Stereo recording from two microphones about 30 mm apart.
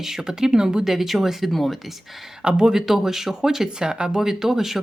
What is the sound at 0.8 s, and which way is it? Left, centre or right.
Speech, centre.